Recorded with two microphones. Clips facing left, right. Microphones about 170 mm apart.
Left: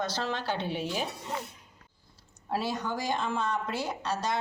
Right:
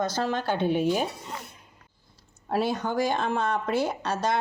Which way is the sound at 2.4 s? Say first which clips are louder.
Right 5 dB; 60° right (ahead or behind).